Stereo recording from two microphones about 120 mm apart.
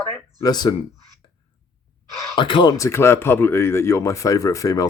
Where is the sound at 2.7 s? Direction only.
25° left (ahead or behind).